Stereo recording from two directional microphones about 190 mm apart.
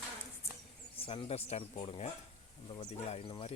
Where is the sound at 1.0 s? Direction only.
30° left (ahead or behind).